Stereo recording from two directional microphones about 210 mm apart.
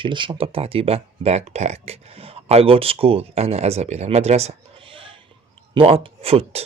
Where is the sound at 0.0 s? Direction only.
20° right (ahead or behind).